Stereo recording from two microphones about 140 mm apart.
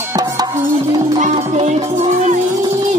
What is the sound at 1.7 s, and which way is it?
Music, 55° right (ahead or behind).